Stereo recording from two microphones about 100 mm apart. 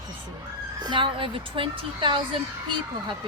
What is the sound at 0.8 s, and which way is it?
Speech, 55° right (ahead or behind).